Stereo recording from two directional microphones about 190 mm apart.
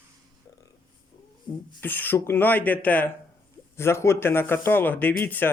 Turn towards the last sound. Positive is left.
turn(degrees=10)  # may be behind; listen again after turning